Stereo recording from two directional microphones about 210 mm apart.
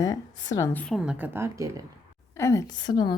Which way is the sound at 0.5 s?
10° left (ahead or behind).